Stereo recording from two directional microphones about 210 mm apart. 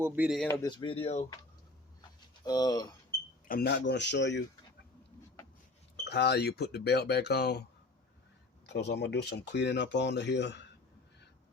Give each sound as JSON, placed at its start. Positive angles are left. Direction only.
{"t": 0.0, "sound": "speech", "side_deg": -5}
{"t": 0.4, "sound": "speech", "side_deg": 15}
{"t": 2.4, "sound": "speech", "side_deg": 20}
{"t": 3.5, "sound": "speech", "side_deg": 50}
{"t": 6.1, "sound": "speech", "side_deg": 50}
{"t": 8.6, "sound": "speech", "side_deg": 50}